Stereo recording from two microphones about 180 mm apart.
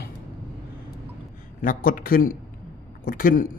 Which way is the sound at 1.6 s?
50° left (ahead or behind).